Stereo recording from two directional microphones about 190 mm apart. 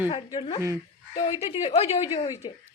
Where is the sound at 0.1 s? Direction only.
25° left (ahead or behind).